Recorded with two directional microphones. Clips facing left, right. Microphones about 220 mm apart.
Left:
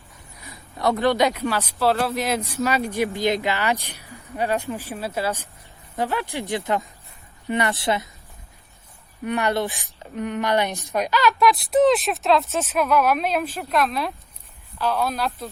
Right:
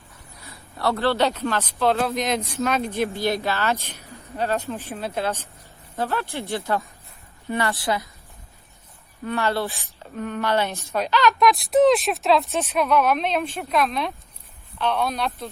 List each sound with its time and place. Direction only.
0.4 s a woman's voice: 15° left (ahead or behind)
9.2 s a woman's voice: 15° left (ahead or behind); by 15.4 s centre (ahead or behind)